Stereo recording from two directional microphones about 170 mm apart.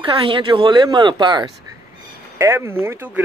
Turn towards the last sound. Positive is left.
turn(degrees=-15)  # may be behind; listen again after turning